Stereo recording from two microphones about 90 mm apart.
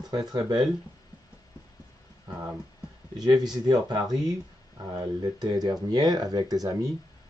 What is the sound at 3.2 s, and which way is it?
Speech, 50° right (ahead or behind).